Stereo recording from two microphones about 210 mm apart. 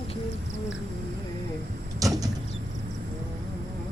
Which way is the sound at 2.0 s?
15° right (ahead or behind).